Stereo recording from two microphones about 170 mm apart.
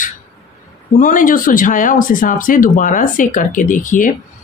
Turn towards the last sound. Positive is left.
turn(degrees=50)  # may be behind; listen again after turning